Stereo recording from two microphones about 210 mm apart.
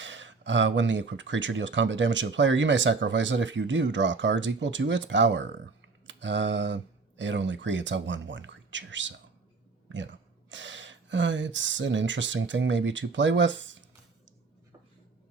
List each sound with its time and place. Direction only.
0.0 s speech: 60° right (ahead or behind)